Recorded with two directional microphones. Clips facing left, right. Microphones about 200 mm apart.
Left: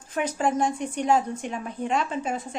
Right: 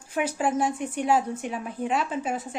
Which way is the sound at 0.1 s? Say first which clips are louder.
Even; 10° right (ahead or behind).